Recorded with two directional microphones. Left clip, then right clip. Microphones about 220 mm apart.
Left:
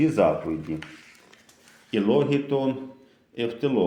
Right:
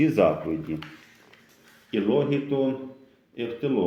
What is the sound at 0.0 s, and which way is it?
Speech, 10° left (ahead or behind).